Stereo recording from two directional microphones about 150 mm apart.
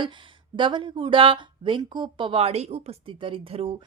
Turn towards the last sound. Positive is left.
turn(degrees=-40)  # may be behind; listen again after turning